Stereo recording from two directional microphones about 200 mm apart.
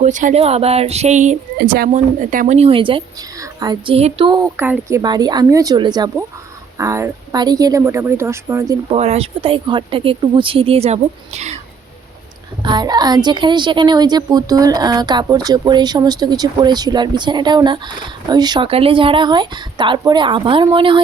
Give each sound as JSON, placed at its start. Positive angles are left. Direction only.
{"t": 0.0, "sound": "speech", "side_deg": -40}
{"t": 1.5, "sound": "speech", "side_deg": -50}
{"t": 2.6, "sound": "a woman's voice", "side_deg": -25}
{"t": 4.5, "sound": "a woman's voice", "side_deg": -10}
{"t": 9.0, "sound": "a woman's voice", "side_deg": -30}
{"t": 12.6, "sound": "a woman's voice", "side_deg": -20}